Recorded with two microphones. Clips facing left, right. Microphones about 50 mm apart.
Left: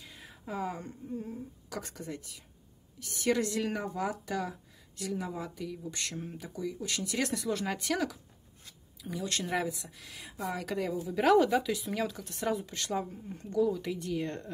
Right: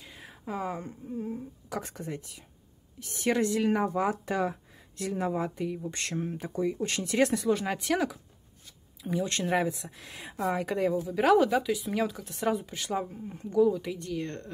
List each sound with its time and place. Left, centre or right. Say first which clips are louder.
0.1 s a sound: right 3 dB; centre
0.7 s speech: right 3 dB; centre
3.8 s speech: right 6 dB; right
7.4 s speech: right 5 dB; centre
9.7 s speech: right 5 dB; right
10.5 s speech: right 6 dB; centre